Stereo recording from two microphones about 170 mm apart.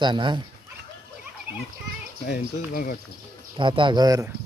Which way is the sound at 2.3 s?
55° left (ahead or behind).